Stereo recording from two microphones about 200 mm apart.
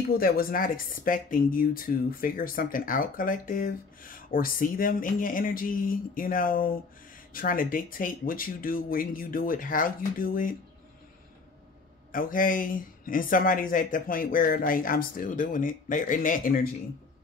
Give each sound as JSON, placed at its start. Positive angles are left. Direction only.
{"t": 0.2, "sound": "speech", "side_deg": 45}
{"t": 12.1, "sound": "speech", "side_deg": 45}